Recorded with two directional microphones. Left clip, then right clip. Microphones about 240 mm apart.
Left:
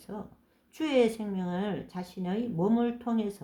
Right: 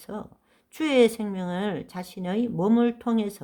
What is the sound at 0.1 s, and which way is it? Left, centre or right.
A woman's voice, right.